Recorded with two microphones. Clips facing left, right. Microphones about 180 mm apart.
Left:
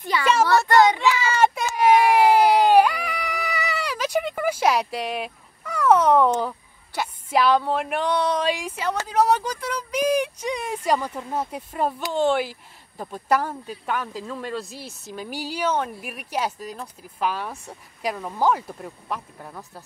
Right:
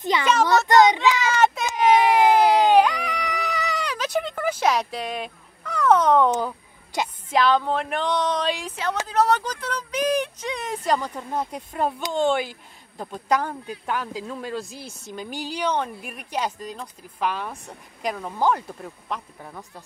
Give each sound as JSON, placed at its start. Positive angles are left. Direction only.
{"t": 0.1, "sound": "a child's voice", "side_deg": -20}
{"t": 1.3, "sound": "a sound", "side_deg": 10}
{"t": 7.2, "sound": "speech", "side_deg": 10}